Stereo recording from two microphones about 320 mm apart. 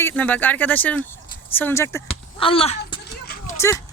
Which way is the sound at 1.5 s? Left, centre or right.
Centre.